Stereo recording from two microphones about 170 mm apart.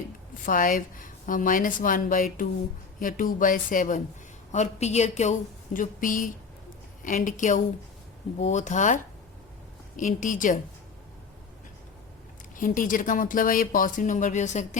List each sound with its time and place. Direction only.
0.4 s a woman's voice: 50° left (ahead or behind)
5.7 s speech: 50° left (ahead or behind)
10.0 s speech: 50° left (ahead or behind)
12.5 s speech: 50° left (ahead or behind)